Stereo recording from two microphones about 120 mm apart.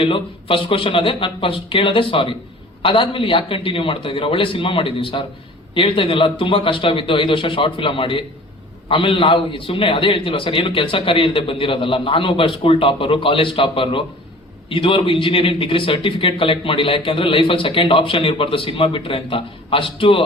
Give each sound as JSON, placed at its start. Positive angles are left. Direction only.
{"t": 0.0, "sound": "speech", "side_deg": 45}